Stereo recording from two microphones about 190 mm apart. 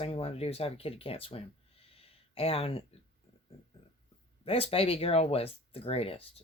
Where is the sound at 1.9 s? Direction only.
30° left (ahead or behind).